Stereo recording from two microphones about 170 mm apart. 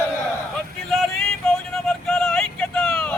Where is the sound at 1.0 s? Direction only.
5° left (ahead or behind).